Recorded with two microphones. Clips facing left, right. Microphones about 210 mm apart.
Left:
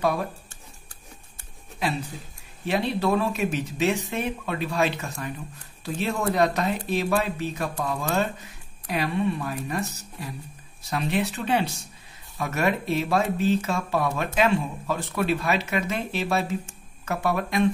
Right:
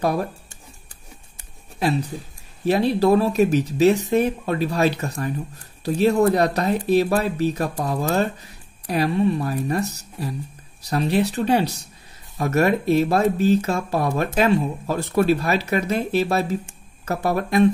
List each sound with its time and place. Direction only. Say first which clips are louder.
0.0 s speech: right 3 dB; 40° right (ahead or behind)
1.8 s speech: right 6 dB; 40° right (ahead or behind)